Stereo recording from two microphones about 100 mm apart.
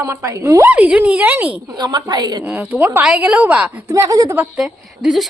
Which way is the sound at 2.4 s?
15° right (ahead or behind).